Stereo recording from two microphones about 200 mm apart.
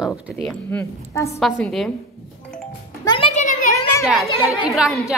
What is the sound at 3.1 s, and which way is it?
Music, 30° left (ahead or behind).